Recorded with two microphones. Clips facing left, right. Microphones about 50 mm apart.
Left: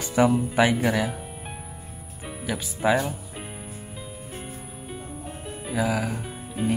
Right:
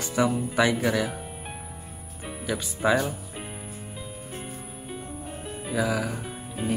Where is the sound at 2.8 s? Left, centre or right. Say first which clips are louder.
Left 1 dB; centre.